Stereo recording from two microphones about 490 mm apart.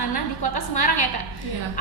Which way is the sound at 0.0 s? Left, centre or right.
Left.